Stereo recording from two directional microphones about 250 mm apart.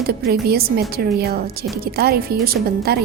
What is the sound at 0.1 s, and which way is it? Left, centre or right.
A woman's voice, right.